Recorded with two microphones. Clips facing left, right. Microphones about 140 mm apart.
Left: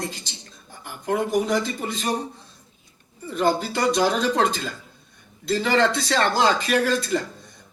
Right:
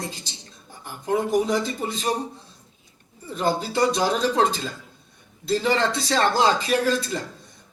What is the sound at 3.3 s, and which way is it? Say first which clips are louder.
A man's voice: left 1 dB; centre (ahead or behind).